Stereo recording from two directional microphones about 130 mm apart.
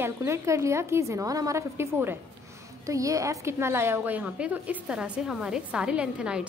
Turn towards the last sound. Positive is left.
turn(degrees=-5)  # may be behind; listen again after turning